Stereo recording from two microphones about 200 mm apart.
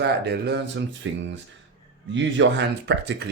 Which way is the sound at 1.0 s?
75° right (ahead or behind).